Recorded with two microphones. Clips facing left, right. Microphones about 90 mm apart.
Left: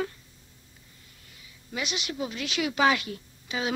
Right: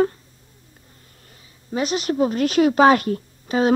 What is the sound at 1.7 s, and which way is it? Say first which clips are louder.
A woman's voice: right 11 dB; 40° right (ahead or behind).